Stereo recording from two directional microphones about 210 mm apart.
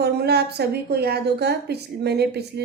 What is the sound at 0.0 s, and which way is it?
A woman's voice, 50° right (ahead or behind).